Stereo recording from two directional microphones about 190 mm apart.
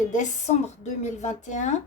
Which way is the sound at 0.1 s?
40° left (ahead or behind).